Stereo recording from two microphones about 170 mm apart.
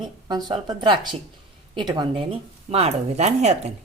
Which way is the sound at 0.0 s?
25° right (ahead or behind).